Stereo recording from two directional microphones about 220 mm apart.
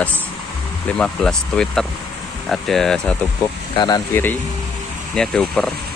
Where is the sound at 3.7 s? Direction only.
15° left (ahead or behind).